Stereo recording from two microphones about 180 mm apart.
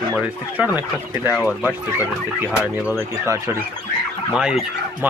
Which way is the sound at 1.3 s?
Centre (ahead or behind).